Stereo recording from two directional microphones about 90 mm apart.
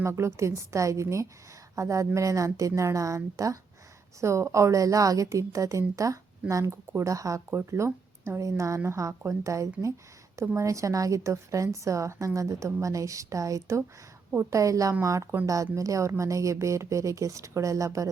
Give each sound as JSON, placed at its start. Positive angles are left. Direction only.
{"t": 0.0, "sound": "a woman's voice", "side_deg": -30}